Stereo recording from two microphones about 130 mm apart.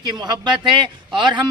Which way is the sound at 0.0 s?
30° right (ahead or behind).